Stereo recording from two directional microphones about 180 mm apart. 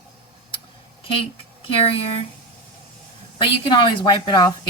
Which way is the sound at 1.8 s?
30° left (ahead or behind).